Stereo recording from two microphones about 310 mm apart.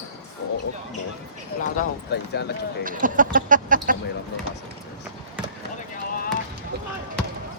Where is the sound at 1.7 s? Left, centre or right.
Left.